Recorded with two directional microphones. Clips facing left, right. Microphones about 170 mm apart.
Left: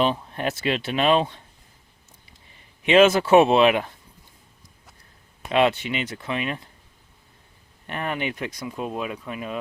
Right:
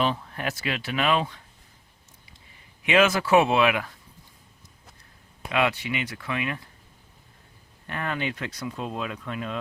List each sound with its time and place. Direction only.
0.0 s speech: 20° left (ahead or behind)
2.8 s speech: 25° left (ahead or behind)
5.5 s speech: 25° left (ahead or behind)
7.9 s speech: 20° left (ahead or behind)